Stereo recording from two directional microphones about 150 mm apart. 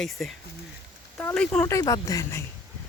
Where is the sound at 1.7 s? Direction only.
25° left (ahead or behind).